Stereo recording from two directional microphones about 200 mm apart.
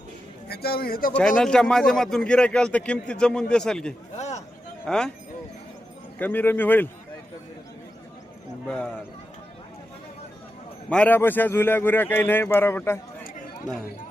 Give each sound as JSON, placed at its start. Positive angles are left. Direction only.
{"t": 0.4, "sound": "a man's voice", "side_deg": 50}
{"t": 1.4, "sound": "a man's voice", "side_deg": 5}
{"t": 4.2, "sound": "chop", "side_deg": 35}
{"t": 4.9, "sound": "a man's voice", "side_deg": 5}
{"t": 6.1, "sound": "a man's voice", "side_deg": 10}
{"t": 8.6, "sound": "a man's voice", "side_deg": 5}
{"t": 10.8, "sound": "a man's voice", "side_deg": 5}